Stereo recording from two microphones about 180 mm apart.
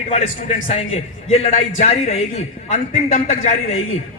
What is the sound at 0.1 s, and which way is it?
A man's voice, 40° left (ahead or behind).